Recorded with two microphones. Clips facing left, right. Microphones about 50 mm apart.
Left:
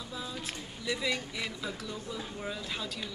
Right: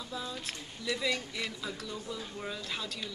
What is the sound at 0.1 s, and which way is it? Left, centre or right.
Speech, centre.